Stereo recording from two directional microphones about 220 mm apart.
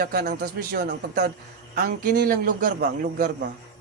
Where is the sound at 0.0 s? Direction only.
40° right (ahead or behind).